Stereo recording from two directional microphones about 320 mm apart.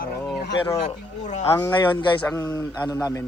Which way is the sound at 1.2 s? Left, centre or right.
Left.